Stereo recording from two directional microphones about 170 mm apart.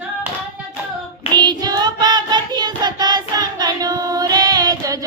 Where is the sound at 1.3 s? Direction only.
25° right (ahead or behind).